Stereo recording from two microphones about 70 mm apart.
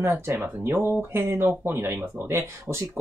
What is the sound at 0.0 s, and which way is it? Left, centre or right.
Speech, right.